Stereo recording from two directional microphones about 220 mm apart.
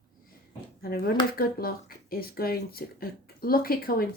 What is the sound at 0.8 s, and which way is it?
Speech, 45° left (ahead or behind).